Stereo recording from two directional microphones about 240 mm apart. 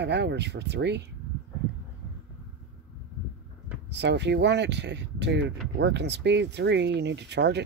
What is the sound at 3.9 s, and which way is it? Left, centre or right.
Speech, right.